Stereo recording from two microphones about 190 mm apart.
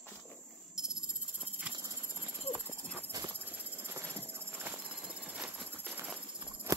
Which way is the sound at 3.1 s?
20° right (ahead or behind).